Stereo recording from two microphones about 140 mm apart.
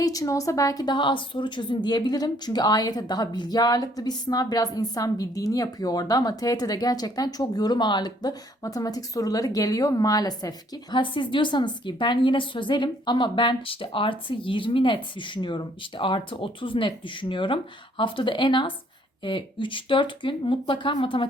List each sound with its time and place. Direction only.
0.0 s a woman's voice: 25° left (ahead or behind)